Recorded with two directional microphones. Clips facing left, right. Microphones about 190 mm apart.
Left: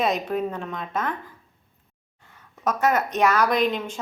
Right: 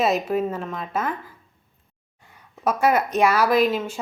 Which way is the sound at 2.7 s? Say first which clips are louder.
Right 2 dB; 10° right (ahead or behind).